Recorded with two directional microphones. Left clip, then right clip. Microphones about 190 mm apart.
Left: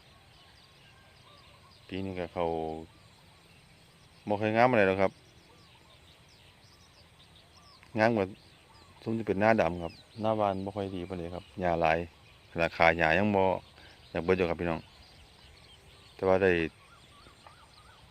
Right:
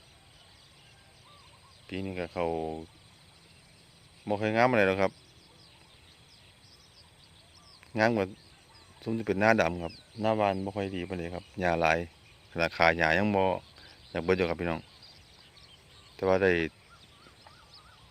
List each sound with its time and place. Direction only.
1.9 s speech: 5° right (ahead or behind)
4.3 s speech: centre (ahead or behind)
7.9 s speech: centre (ahead or behind)
16.1 s speech: centre (ahead or behind)